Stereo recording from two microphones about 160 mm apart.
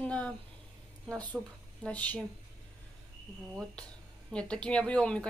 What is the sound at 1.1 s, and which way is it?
Speech, 30° right (ahead or behind).